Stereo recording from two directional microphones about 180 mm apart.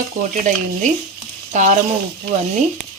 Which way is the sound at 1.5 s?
40° right (ahead or behind).